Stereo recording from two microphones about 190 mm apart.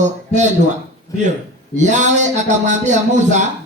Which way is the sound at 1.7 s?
40° right (ahead or behind).